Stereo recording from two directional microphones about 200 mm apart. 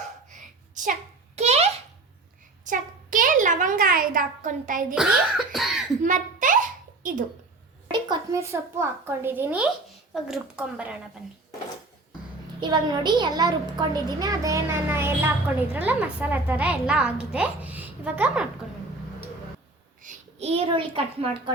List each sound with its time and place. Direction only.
0.7 s a sound: 40° right (ahead or behind)
1.4 s babbling: 30° right (ahead or behind)
2.6 s a sound: 40° right (ahead or behind)
4.9 s cough: 5° right (ahead or behind)
6.0 s a sound: 40° right (ahead or behind)
7.0 s a child's voice: 45° right (ahead or behind)
7.9 s a woman's voice: 20° right (ahead or behind); by 10.9 s 5° right (ahead or behind)
12.5 s a woman's voice: 20° right (ahead or behind); by 18.4 s 5° right (ahead or behind)
20.0 s a child's voice: 35° right (ahead or behind)